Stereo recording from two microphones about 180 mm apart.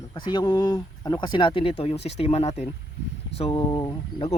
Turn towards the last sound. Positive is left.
turn(degrees=25)  # may be behind; listen again after turning